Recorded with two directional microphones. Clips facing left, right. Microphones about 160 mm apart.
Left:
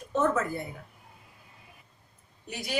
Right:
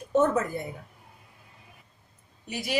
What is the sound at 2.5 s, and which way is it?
Speech, centre (ahead or behind).